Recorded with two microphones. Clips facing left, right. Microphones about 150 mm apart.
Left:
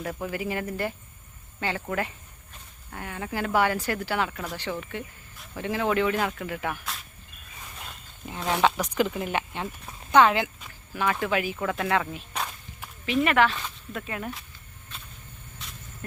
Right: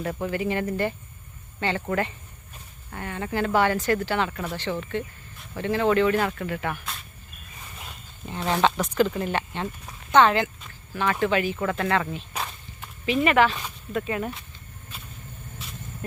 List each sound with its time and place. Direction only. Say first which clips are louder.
0.0 s speech: right 4 dB; centre (ahead or behind)
4.5 s speech: right 4 dB; 10° left (ahead or behind)
8.5 s speech: right 2 dB; 10° left (ahead or behind)
12.3 s walk: even; centre (ahead or behind)
13.9 s speech: right 7 dB; centre (ahead or behind)